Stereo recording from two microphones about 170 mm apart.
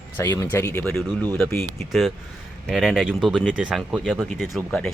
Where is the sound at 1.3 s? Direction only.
10° left (ahead or behind).